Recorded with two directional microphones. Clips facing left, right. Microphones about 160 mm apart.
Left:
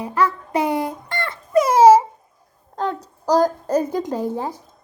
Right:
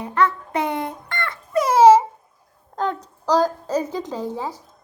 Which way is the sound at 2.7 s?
35° left (ahead or behind).